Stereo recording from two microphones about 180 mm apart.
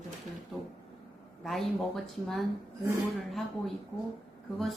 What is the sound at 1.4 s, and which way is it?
A woman's voice, centre (ahead or behind).